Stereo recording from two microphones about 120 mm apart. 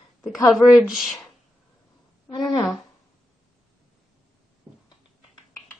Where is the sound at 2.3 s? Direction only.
35° left (ahead or behind).